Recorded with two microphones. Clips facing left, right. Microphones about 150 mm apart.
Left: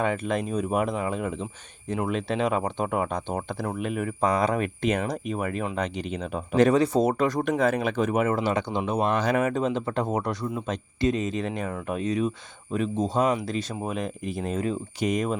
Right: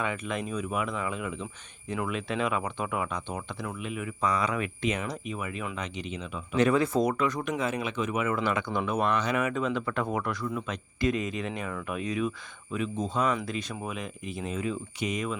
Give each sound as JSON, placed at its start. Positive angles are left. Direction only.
{"t": 0.0, "sound": "speech", "side_deg": 35}
{"t": 6.7, "sound": "speech", "side_deg": 30}
{"t": 8.4, "sound": "speech", "side_deg": 30}